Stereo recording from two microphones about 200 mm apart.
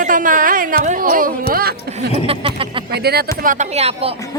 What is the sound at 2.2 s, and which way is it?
Speech, 30° right (ahead or behind).